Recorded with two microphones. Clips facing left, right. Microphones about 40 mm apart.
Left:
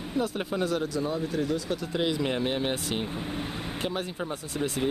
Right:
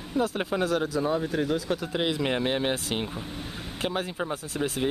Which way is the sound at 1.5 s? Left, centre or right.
Centre.